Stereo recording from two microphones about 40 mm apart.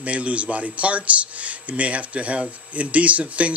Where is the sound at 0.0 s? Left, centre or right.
Right.